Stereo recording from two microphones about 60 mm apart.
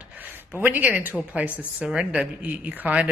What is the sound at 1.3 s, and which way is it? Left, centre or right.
A woman's voice, right.